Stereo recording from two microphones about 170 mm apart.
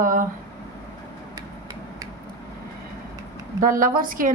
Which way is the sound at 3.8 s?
55° right (ahead or behind).